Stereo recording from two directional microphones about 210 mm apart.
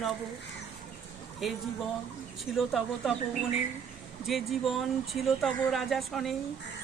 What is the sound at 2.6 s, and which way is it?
Speech, centre (ahead or behind).